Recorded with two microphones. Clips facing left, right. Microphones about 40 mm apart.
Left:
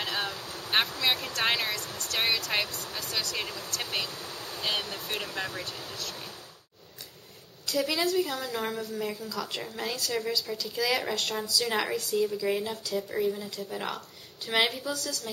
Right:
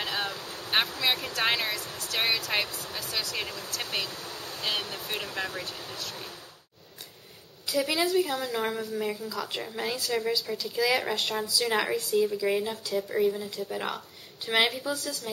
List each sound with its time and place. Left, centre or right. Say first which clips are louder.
0.0 s speech: right 1 dB; centre
7.8 s speech: right 1 dB; centre